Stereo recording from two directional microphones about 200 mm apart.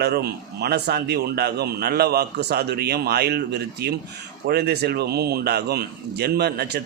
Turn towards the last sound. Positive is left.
turn(degrees=-55)  # may be behind; listen again after turning